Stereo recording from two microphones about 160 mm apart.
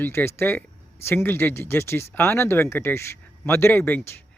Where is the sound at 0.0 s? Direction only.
15° left (ahead or behind).